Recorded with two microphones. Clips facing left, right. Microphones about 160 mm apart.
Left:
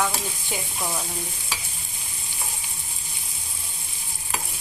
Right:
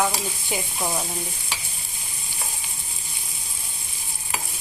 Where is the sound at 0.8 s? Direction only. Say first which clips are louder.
Right 3 dB; 20° right (ahead or behind).